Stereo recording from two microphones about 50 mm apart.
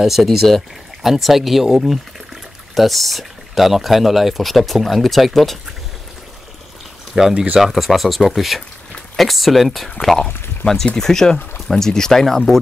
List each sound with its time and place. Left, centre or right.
0.0 s speech: centre
7.2 s speech: centre
10.6 s speech: left
11.0 s speech: centre